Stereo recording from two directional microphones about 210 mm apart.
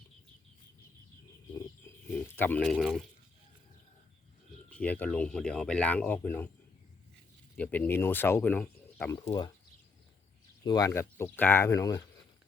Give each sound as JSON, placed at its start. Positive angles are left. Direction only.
{"t": 1.5, "sound": "a sound", "side_deg": 10}
{"t": 4.7, "sound": "speech", "side_deg": 5}
{"t": 7.5, "sound": "speech", "side_deg": 5}
{"t": 9.1, "sound": "speech", "side_deg": 20}
{"t": 10.6, "sound": "speech", "side_deg": 20}